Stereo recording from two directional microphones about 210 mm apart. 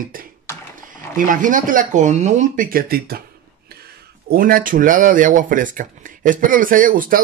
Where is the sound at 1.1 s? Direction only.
40° right (ahead or behind).